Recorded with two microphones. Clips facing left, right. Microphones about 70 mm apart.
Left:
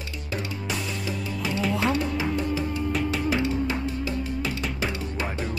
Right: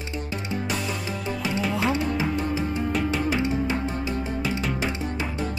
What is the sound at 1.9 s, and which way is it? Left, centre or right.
Music, right.